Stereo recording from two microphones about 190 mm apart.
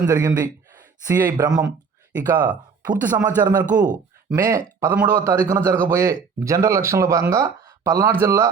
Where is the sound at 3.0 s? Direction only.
10° right (ahead or behind).